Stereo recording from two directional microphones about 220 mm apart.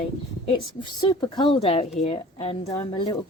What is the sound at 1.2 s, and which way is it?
A woman's voice, 20° left (ahead or behind).